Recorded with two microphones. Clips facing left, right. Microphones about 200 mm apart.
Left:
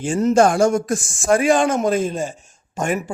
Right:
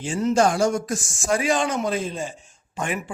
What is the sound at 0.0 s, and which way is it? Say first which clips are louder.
A man's voice: left 5 dB; 45° left (ahead or behind).